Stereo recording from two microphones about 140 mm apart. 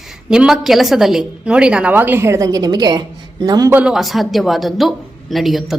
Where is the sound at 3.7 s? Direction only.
10° right (ahead or behind).